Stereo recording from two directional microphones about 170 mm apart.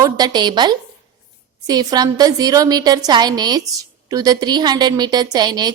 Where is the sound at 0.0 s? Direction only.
25° right (ahead or behind).